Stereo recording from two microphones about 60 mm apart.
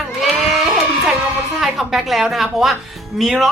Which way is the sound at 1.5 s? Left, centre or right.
Centre.